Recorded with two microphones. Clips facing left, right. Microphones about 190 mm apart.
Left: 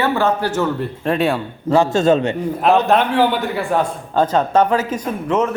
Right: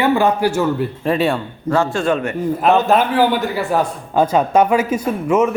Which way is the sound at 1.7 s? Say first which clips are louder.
Left 3 dB; 20° left (ahead or behind).